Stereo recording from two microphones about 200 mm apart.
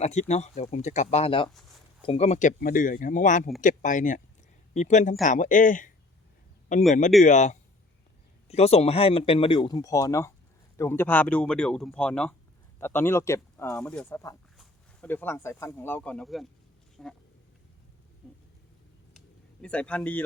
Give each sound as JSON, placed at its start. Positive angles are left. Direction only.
{"t": 0.0, "sound": "speech", "side_deg": 35}
{"t": 19.6, "sound": "speech", "side_deg": 5}